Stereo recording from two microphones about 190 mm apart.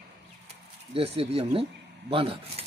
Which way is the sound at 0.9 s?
30° right (ahead or behind).